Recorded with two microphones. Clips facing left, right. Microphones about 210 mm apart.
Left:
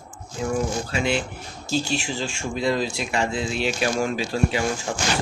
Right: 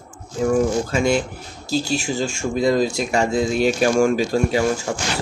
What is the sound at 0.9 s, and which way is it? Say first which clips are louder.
Speech: right 5 dB; 45° right (ahead or behind).